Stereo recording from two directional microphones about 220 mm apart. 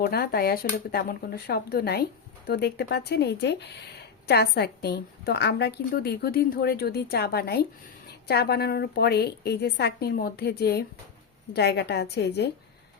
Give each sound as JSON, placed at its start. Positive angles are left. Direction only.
{"t": 0.0, "sound": "a woman's voice", "side_deg": 45}